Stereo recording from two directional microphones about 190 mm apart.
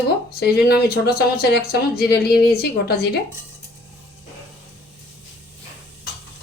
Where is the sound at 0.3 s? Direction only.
60° left (ahead or behind).